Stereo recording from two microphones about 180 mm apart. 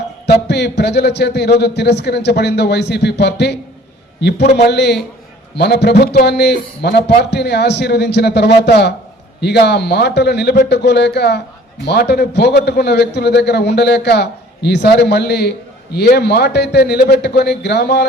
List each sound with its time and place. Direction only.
0.3 s a man's voice: 65° left (ahead or behind)